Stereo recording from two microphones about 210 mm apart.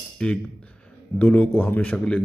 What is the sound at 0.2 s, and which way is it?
Speech, 5° left (ahead or behind).